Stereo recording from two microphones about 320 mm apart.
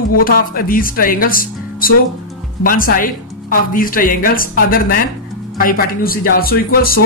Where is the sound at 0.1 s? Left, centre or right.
Left.